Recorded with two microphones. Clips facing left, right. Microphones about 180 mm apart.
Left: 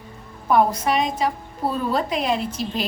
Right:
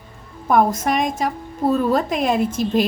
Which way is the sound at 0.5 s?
45° right (ahead or behind).